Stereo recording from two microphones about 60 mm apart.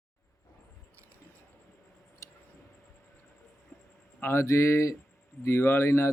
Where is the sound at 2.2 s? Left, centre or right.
Left.